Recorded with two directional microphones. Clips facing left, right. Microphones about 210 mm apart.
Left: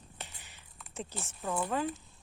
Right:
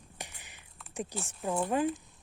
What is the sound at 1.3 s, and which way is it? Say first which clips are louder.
Speech: right 3 dB; 15° right (ahead or behind).